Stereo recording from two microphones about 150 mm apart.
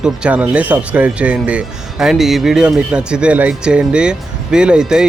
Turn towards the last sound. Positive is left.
turn(degrees=-5)  # may be behind; listen again after turning